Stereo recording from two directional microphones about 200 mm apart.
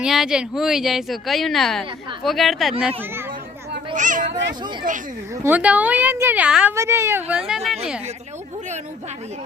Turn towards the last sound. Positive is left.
turn(degrees=0)  # may be behind; listen again after turning